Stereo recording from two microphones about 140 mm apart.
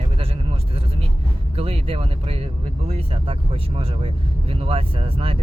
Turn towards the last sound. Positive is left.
turn(degrees=-40)  # may be behind; listen again after turning